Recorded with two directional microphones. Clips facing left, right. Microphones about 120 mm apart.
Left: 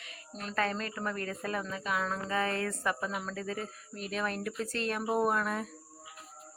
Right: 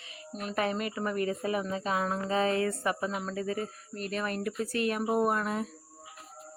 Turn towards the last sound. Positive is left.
turn(degrees=-5)  # may be behind; listen again after turning